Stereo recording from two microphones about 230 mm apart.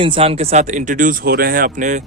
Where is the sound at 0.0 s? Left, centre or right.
Right.